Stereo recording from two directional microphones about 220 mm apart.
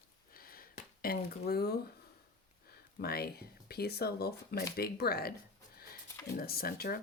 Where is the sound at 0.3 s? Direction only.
40° left (ahead or behind).